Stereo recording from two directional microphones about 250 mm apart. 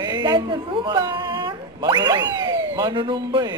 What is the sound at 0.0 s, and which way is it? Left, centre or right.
Speech, centre.